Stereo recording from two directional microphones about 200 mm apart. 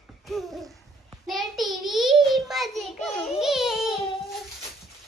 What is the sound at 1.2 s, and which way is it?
Child singing, centre (ahead or behind).